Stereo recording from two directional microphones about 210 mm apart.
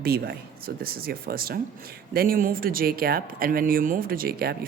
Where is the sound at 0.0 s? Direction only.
45° right (ahead or behind).